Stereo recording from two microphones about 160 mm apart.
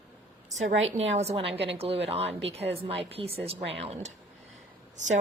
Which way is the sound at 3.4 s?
40° right (ahead or behind).